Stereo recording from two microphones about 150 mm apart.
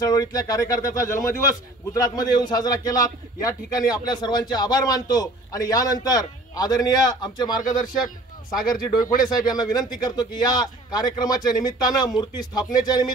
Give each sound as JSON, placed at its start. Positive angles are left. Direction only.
{"t": 0.0, "sound": "a man's voice", "side_deg": 25}
{"t": 9.0, "sound": "speech", "side_deg": 65}
{"t": 9.3, "sound": "a man's voice", "side_deg": 25}